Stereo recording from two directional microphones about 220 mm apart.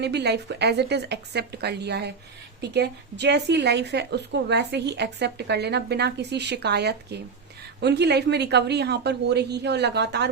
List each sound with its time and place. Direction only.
0.0 s a woman's voice: 50° right (ahead or behind)